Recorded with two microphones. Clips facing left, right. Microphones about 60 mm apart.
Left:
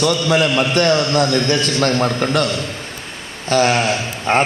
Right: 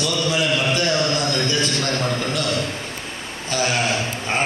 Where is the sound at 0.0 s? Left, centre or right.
Left.